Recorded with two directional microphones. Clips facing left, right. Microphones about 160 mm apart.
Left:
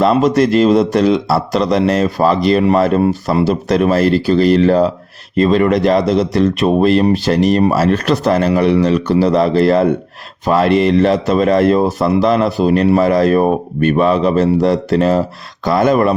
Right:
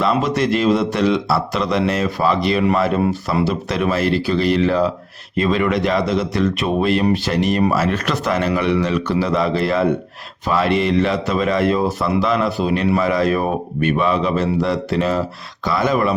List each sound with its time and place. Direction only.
0.0 s speech: 40° left (ahead or behind)